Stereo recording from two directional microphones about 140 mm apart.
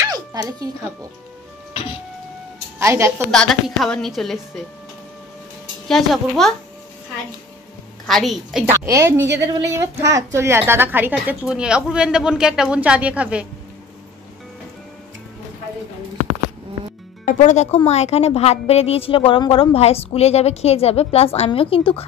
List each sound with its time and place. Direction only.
0.0 s music: 25° right (ahead or behind)
2.8 s a woman's voice: 20° right (ahead or behind)
3.3 s a woman's voice: 5° left (ahead or behind)
5.9 s a woman's voice: centre (ahead or behind)
8.1 s a woman's voice: centre (ahead or behind)
8.6 s a woman's voice: 20° right (ahead or behind)
17.2 s a woman's voice: 65° left (ahead or behind); by 22.0 s 40° left (ahead or behind)